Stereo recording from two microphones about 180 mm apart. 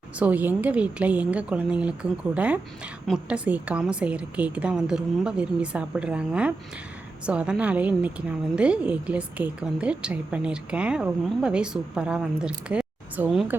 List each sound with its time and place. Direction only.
0.2 s a woman's voice: 10° right (ahead or behind)